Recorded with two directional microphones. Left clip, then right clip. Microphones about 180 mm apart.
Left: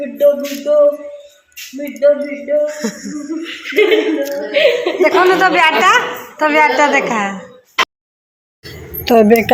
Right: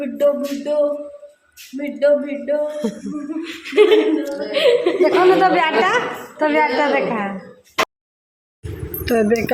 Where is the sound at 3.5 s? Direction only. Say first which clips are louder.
Left 1 dB; 80° right.